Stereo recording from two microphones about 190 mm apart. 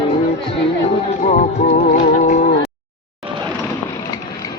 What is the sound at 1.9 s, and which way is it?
Music, 40° left (ahead or behind).